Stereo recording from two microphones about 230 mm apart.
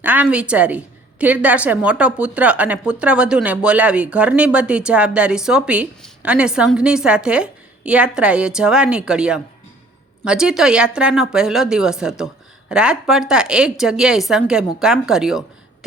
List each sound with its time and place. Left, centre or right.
0.0 s a woman's voice: centre